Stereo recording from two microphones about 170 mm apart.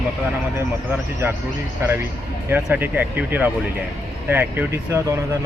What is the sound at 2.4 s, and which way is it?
Speech, 10° right (ahead or behind).